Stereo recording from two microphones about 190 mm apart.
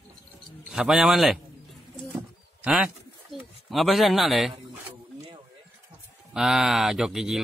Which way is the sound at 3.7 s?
Centre (ahead or behind).